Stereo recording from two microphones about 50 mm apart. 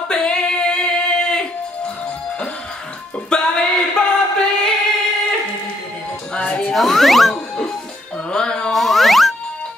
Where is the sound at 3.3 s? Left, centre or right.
Centre.